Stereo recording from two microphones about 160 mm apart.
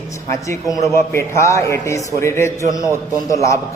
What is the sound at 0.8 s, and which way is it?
A man's voice, 15° left (ahead or behind).